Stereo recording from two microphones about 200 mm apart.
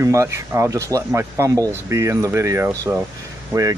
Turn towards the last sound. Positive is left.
turn(degrees=-15)  # may be behind; listen again after turning